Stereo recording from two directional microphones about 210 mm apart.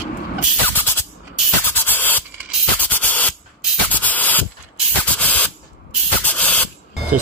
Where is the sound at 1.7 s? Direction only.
10° left (ahead or behind).